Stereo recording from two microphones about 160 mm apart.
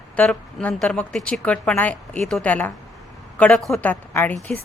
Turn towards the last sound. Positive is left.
turn(degrees=10)  # may be behind; listen again after turning